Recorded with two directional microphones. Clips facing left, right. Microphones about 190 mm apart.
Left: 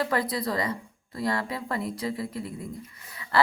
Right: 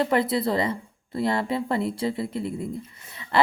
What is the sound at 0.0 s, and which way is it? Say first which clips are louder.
A woman's voice: right 5 dB; 25° right (ahead or behind).